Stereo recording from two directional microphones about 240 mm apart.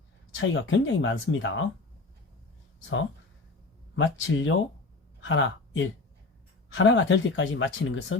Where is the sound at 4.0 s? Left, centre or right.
Left.